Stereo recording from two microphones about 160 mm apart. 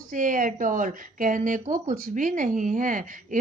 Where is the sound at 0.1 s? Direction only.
55° right (ahead or behind).